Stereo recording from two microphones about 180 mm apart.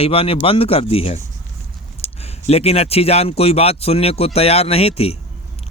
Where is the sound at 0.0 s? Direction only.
30° left (ahead or behind).